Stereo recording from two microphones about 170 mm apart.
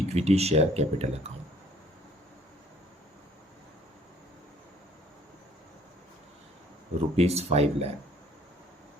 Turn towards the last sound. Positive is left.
turn(degrees=-40)  # may be behind; listen again after turning